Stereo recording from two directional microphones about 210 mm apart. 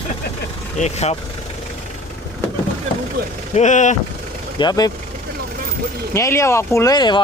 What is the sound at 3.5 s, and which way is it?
Speech, 35° left (ahead or behind).